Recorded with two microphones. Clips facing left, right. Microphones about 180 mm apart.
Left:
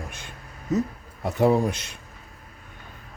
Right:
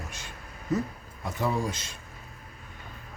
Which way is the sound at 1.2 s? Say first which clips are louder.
Left 9 dB; 65° left (ahead or behind).